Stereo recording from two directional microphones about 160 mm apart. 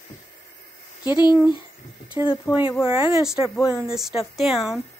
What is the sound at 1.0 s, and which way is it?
Speech, 25° left (ahead or behind).